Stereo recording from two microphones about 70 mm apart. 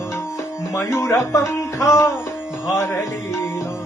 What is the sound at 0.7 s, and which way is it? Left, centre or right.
Speech, left.